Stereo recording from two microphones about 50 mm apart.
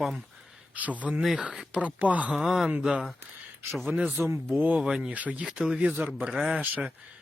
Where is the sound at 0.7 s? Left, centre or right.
Right.